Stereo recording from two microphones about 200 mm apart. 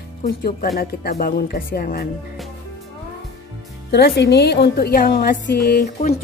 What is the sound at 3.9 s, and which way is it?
A woman's voice, 55° left (ahead or behind).